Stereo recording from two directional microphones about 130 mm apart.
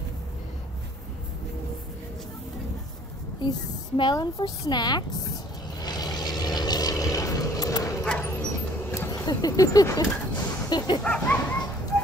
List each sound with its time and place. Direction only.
3.4 s a woman's voice: 35° left (ahead or behind)
5.8 s vehicle: 30° left (ahead or behind)
8.0 s dog: 5° left (ahead or behind)
9.2 s speech: 30° left (ahead or behind)
11.0 s a child's voice: 5° left (ahead or behind)